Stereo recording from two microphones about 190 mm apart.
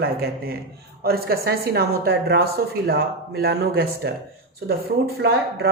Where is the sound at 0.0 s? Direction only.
55° right (ahead or behind).